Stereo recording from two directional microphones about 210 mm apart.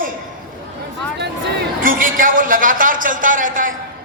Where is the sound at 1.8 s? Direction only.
40° right (ahead or behind).